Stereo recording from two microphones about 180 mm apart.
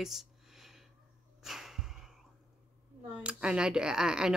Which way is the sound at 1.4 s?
Centre (ahead or behind).